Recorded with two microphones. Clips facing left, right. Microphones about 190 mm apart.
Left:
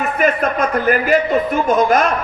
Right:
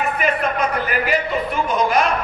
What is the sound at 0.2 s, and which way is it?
A man's voice, 45° left (ahead or behind).